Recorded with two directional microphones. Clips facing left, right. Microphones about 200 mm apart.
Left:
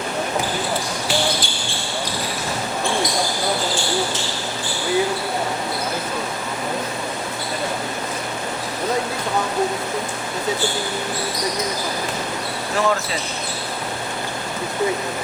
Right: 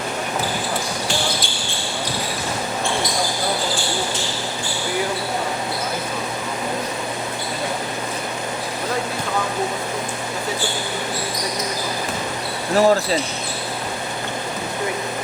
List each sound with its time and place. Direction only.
12.7 s basketball bounce: 35° right (ahead or behind)